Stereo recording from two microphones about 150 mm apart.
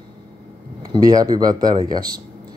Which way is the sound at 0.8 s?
25° right (ahead or behind).